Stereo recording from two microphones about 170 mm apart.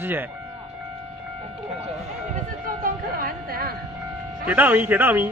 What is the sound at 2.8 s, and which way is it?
Speech, 60° right (ahead or behind).